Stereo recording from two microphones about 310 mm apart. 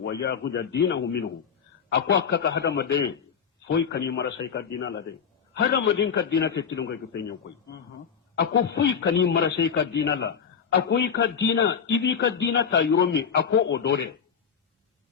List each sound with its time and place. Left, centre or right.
0.0 s a man's voice: left
8.4 s a man's voice: left